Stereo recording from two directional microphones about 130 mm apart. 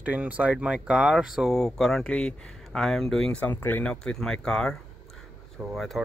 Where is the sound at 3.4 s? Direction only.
15° left (ahead or behind).